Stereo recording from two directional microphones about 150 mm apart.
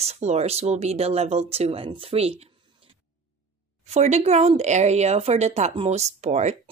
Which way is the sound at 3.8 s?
50° right (ahead or behind).